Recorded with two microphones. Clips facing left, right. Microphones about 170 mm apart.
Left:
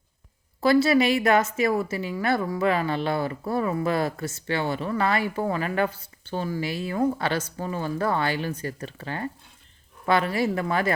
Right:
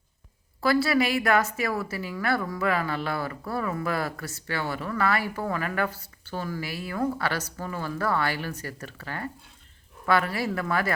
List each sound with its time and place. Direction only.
0.6 s a woman's voice: 20° left (ahead or behind)